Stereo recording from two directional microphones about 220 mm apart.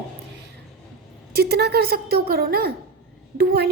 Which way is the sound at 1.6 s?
45° right (ahead or behind).